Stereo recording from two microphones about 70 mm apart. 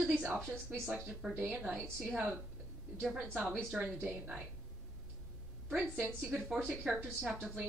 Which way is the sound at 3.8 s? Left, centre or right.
Centre.